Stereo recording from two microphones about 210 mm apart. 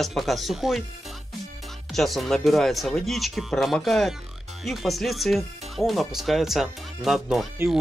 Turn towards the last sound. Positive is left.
turn(degrees=0)  # may be behind; listen again after turning